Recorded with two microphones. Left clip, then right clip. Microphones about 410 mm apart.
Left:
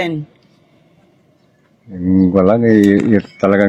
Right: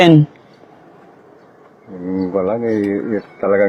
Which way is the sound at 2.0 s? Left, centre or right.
Left.